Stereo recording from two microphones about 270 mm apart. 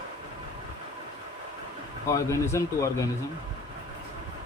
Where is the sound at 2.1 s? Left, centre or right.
Centre.